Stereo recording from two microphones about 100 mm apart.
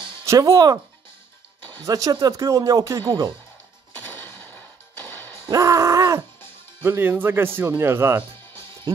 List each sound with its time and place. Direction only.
0.2 s speech: 35° right (ahead or behind)
1.8 s speech: 40° right (ahead or behind)
4.1 s music: 20° left (ahead or behind)
5.5 s groan: 35° right (ahead or behind)
6.8 s speech: 20° right (ahead or behind)